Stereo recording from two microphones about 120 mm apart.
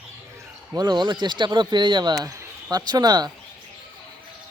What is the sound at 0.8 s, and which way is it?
Speech, 35° right (ahead or behind).